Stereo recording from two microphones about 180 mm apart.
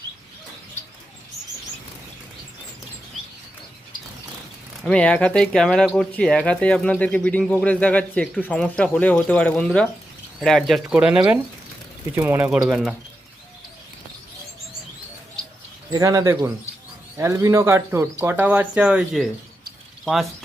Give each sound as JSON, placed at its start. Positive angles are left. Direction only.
{"t": 4.8, "sound": "speech", "side_deg": 5}
{"t": 15.9, "sound": "speech", "side_deg": -20}